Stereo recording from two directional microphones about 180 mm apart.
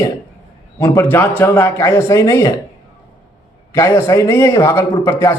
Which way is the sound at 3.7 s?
15° left (ahead or behind).